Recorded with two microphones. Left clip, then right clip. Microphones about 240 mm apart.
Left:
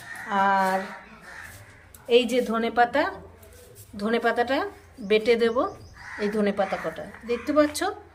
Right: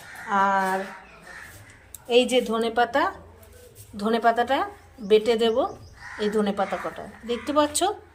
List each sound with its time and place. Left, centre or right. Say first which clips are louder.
0.3 s a woman's voice: even; centre
2.0 s a woman's voice: right 1 dB; centre